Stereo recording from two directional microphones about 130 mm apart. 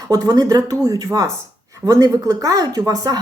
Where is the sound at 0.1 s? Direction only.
30° right (ahead or behind).